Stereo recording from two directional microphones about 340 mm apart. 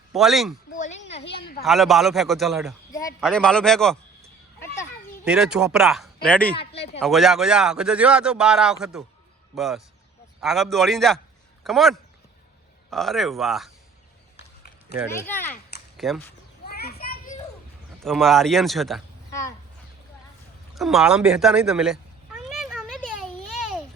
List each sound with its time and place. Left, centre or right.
0.1 s speech: centre
0.8 s a sound: centre
1.6 s a man's voice: centre
4.6 s a sound: centre
7.0 s a man's voice: centre
15.3 s a man's voice: centre
16.6 s children playing: left
18.0 s speech: centre
20.7 s cat: centre